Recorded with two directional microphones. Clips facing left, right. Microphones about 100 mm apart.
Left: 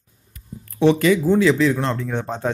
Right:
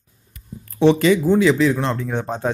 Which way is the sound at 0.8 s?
25° right (ahead or behind).